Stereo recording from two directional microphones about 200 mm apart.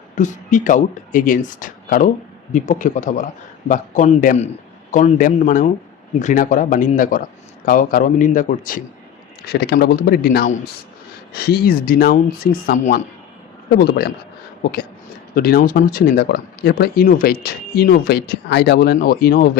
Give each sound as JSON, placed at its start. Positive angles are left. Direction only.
{"t": 0.2, "sound": "speech", "side_deg": 40}
{"t": 13.7, "sound": "speech", "side_deg": 50}